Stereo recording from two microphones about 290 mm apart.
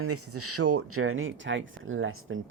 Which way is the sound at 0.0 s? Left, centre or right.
Right.